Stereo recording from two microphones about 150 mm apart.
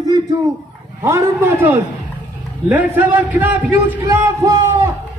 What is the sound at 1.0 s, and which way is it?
A man's voice, 15° right (ahead or behind).